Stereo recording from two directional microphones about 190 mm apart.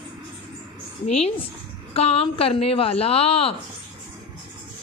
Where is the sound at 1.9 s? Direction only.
30° left (ahead or behind).